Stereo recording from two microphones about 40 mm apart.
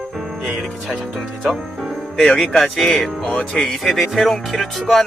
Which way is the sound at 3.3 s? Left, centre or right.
Left.